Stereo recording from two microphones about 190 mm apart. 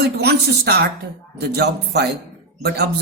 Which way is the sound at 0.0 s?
60° right (ahead or behind).